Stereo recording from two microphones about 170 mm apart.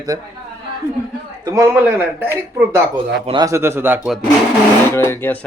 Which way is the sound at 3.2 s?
30° right (ahead or behind).